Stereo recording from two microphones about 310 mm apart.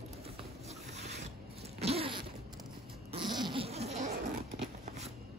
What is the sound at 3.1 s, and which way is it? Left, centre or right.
Laughter, centre.